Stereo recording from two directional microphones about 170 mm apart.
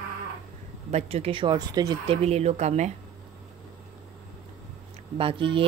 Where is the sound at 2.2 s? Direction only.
40° right (ahead or behind).